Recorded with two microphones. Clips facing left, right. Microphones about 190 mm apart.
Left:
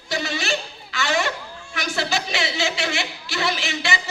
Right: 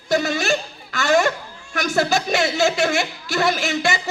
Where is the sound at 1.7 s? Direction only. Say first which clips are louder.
Right 6 dB; 45° right (ahead or behind).